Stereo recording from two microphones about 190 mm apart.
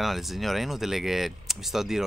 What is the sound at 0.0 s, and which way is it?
Speech, centre (ahead or behind).